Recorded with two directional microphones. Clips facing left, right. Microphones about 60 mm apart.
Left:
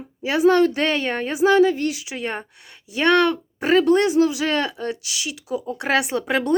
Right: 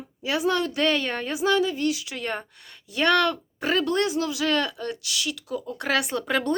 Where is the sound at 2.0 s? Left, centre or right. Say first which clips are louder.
Left 3 dB; centre.